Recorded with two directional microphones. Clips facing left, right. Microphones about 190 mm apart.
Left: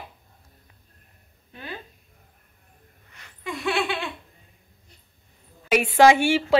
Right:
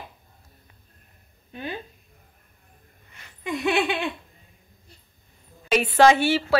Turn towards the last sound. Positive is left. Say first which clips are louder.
# left 1 dB
turn(degrees=10)  # may be behind; listen again after turning